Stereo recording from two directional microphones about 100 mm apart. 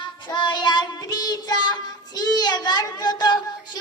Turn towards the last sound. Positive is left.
turn(degrees=45)  # may be behind; listen again after turning